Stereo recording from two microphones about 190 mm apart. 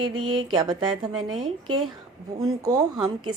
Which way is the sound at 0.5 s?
25° right (ahead or behind).